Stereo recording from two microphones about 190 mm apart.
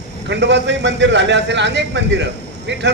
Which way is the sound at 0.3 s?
65° right (ahead or behind).